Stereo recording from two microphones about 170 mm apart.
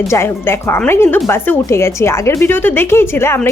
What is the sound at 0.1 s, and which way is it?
Speech, 15° left (ahead or behind).